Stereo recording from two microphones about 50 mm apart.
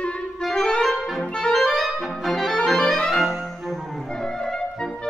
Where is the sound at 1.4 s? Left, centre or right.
Centre.